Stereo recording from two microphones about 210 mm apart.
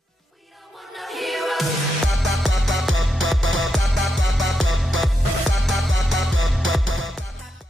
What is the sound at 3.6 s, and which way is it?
Music, centre (ahead or behind).